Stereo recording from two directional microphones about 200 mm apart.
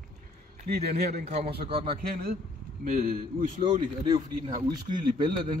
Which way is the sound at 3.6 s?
25° right (ahead or behind).